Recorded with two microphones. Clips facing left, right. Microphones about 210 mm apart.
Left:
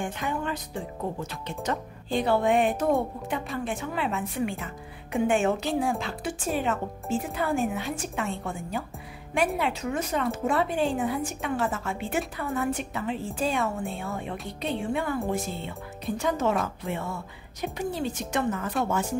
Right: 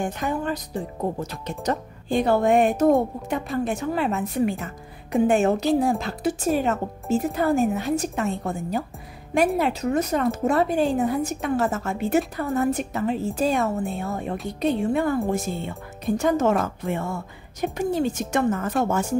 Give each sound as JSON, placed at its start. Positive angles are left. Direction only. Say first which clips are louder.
{"t": 0.0, "sound": "speech", "louder": "right 4 dB", "side_deg": -40}
{"t": 1.6, "sound": "speech", "louder": "right 4 dB", "side_deg": -45}